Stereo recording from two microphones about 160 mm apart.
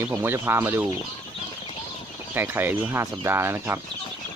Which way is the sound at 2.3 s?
15° right (ahead or behind).